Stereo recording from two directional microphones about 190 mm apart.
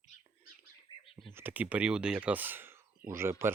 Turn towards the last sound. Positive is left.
turn(degrees=-10)  # may be behind; listen again after turning